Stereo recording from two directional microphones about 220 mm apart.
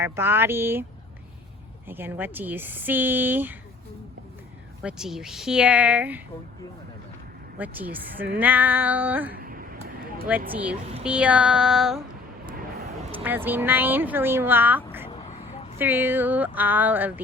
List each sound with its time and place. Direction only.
0.0 s speech: 10° right (ahead or behind)
1.9 s speech: 10° right (ahead or behind)
4.8 s speech: 5° right (ahead or behind)
7.6 s speech: 5° right (ahead or behind)
9.3 s a sound: 40° right (ahead or behind)
10.5 s speech: 5° right (ahead or behind)
13.2 s speech: 10° right (ahead or behind)
15.1 s vehicle: 25° left (ahead or behind)
15.8 s speech: 10° right (ahead or behind)